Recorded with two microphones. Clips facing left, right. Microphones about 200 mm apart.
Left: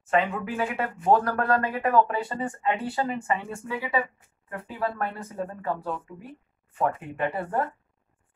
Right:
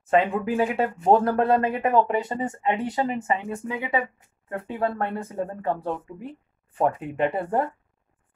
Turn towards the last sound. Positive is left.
turn(degrees=-20)  # may be behind; listen again after turning